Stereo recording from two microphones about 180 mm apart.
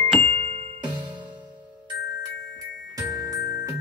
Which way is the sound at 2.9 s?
20° right (ahead or behind).